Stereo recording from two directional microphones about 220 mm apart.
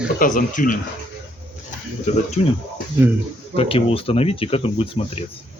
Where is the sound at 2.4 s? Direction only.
30° left (ahead or behind).